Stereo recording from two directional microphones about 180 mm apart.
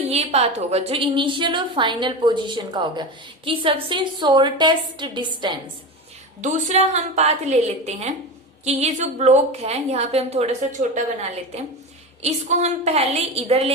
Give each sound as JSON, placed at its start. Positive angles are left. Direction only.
{"t": 0.1, "sound": "a woman's voice", "side_deg": -35}
{"t": 6.4, "sound": "a woman's voice", "side_deg": -40}